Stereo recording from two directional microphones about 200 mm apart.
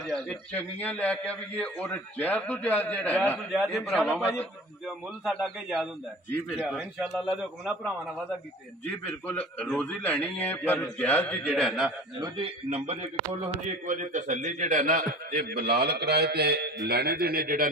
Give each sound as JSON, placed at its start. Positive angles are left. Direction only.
{"t": 0.0, "sound": "a man's voice", "side_deg": 0}
{"t": 8.8, "sound": "a man's voice", "side_deg": 10}
{"t": 12.4, "sound": "a man's voice", "side_deg": -30}